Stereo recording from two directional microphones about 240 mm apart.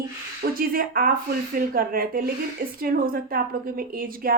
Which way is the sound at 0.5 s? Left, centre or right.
Right.